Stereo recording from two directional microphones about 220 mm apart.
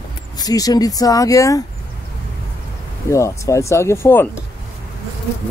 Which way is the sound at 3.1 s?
15° left (ahead or behind).